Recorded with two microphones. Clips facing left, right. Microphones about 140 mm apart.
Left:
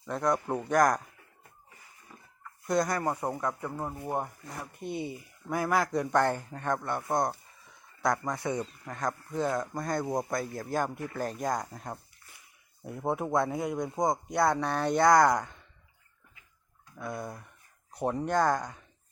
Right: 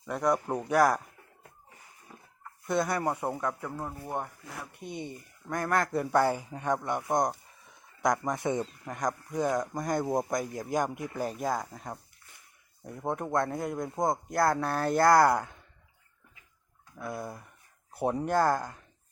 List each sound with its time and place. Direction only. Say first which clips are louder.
0.0 s speech: right 1 dB; 10° right (ahead or behind)
2.6 s speech: even; 5° right (ahead or behind)
3.4 s speech: left 1 dB; 5° left (ahead or behind)
4.4 s speech: left 3 dB; centre (ahead or behind)
17.0 s speech: even; centre (ahead or behind)